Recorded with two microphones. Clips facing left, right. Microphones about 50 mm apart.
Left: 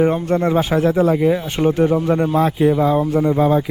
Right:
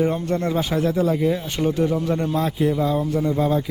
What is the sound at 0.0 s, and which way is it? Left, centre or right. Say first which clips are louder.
Speech: left 5 dB; left.